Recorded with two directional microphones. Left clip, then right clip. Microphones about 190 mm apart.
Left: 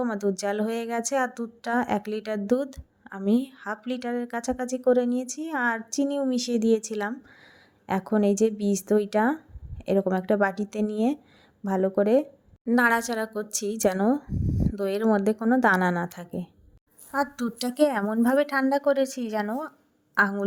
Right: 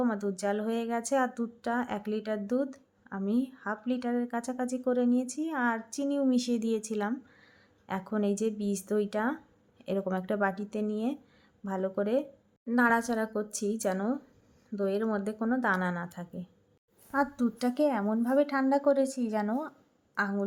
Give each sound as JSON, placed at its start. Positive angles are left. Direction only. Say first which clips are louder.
{"t": 0.0, "sound": "speech", "louder": "left 4 dB", "side_deg": 30}